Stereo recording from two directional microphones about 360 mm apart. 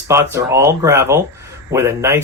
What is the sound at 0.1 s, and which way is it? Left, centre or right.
Speech, centre.